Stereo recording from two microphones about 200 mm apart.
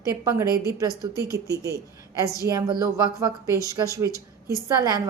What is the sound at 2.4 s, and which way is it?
A woman's voice, 20° right (ahead or behind).